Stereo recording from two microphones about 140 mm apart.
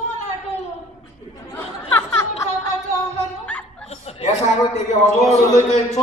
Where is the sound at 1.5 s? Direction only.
15° left (ahead or behind).